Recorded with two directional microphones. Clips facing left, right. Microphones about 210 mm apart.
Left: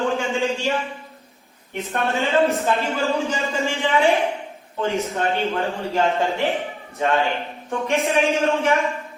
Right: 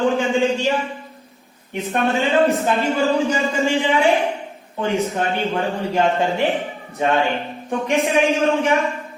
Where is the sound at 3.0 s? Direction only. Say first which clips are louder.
Right 4 dB; centre (ahead or behind).